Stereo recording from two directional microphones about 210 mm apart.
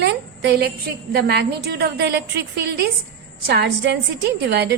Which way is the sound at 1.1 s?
50° right (ahead or behind).